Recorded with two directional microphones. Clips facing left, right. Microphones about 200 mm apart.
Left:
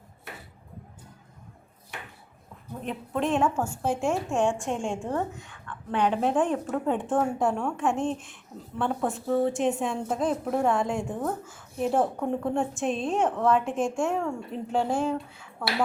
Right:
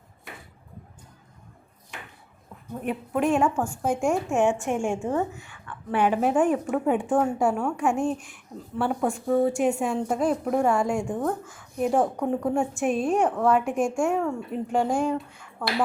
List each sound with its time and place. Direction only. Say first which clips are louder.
2.8 s speech: right 3 dB; 10° right (ahead or behind)
3.2 s a woman's voice: right 2 dB; centre (ahead or behind)
4.3 s speech: right 3 dB; 15° right (ahead or behind)
4.9 s a woman's voice: right 3 dB; centre (ahead or behind)
7.1 s a woman's voice: even; centre (ahead or behind)
12.8 s speech: right 4 dB; 10° right (ahead or behind)
13.1 s a woman's voice: left 1 dB; centre (ahead or behind)
13.8 s a woman's voice: right 3 dB; centre (ahead or behind)
14.9 s a woman's voice: right 2 dB; 5° left (ahead or behind)